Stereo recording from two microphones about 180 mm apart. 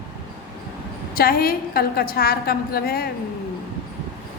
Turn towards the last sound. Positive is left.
turn(degrees=55)  # may be behind; listen again after turning